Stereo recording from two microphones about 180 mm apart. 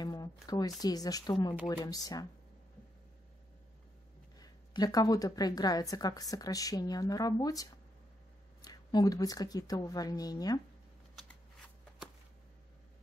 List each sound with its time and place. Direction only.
0.0 s a woman's voice: 20° left (ahead or behind)
4.4 s a woman's voice: 20° left (ahead or behind)